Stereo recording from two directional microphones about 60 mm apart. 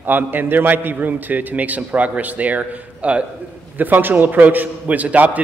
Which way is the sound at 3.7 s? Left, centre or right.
Right.